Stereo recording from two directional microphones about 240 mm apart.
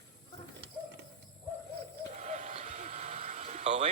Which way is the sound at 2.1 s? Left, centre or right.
Right.